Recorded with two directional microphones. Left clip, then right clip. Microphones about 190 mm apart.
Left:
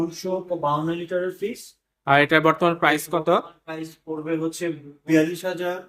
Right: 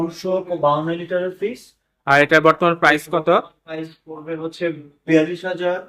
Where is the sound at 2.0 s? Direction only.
5° left (ahead or behind).